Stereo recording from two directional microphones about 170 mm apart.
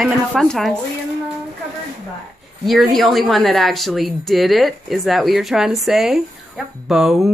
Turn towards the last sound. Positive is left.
turn(degrees=0)  # may be behind; listen again after turning